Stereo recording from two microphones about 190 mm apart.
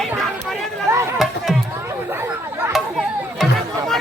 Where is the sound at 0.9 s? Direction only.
15° right (ahead or behind).